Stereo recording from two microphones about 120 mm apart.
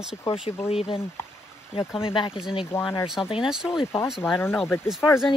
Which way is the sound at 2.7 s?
20° left (ahead or behind).